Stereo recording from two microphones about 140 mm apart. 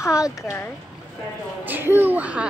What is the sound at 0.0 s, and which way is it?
Speech, 20° left (ahead or behind).